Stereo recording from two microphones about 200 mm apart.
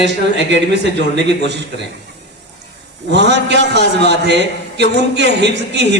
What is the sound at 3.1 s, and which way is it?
Speech, 60° right (ahead or behind).